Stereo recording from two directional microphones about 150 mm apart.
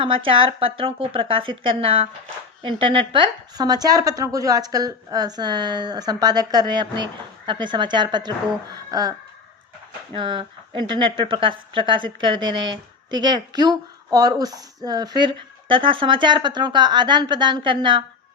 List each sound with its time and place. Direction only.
0.0 s a woman's voice: 35° right (ahead or behind)
8.7 s a sound: 25° right (ahead or behind)
10.2 s a woman's voice: 30° right (ahead or behind)